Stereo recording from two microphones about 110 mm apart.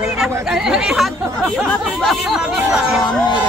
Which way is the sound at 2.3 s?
5° right (ahead or behind).